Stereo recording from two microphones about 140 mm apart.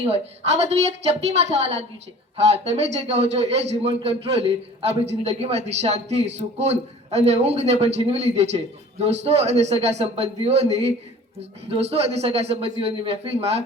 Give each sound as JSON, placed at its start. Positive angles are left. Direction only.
{"t": 0.0, "sound": "a man's voice", "side_deg": -50}